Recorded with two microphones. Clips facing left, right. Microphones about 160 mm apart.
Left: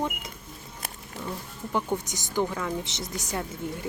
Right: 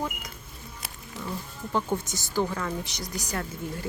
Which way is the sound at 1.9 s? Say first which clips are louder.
Even; 15° left (ahead or behind).